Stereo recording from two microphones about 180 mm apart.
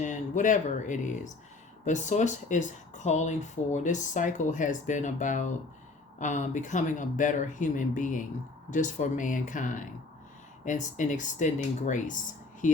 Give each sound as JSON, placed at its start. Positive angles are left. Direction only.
{"t": 0.0, "sound": "speech", "side_deg": 45}